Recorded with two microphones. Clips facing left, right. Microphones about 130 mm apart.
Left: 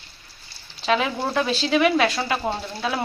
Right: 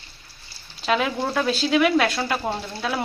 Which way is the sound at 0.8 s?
Centre (ahead or behind).